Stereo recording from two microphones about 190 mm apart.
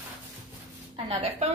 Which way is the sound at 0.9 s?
35° right (ahead or behind).